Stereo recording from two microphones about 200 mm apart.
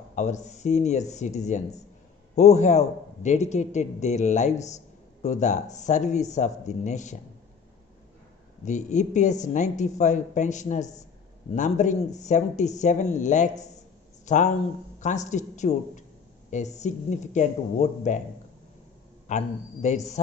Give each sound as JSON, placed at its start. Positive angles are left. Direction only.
{"t": 0.1, "sound": "a man's voice", "side_deg": 35}
{"t": 8.6, "sound": "a man's voice", "side_deg": 35}
{"t": 19.2, "sound": "a man's voice", "side_deg": 35}